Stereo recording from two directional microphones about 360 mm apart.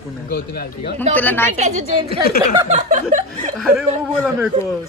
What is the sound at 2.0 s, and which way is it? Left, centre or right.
Speech, left.